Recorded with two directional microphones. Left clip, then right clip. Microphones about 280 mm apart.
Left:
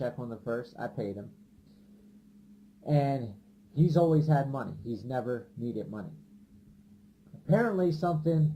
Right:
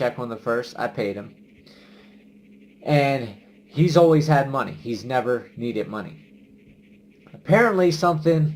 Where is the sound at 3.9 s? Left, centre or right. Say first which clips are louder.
Right 11 dB; centre.